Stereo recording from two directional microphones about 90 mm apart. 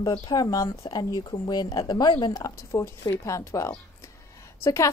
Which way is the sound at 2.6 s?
30° left (ahead or behind).